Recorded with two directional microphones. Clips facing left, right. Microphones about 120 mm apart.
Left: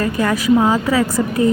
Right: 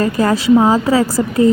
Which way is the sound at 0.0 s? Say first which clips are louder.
Right 3 dB; 35° right (ahead or behind).